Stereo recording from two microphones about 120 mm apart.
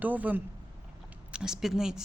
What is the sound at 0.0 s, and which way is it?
Speech, 15° right (ahead or behind).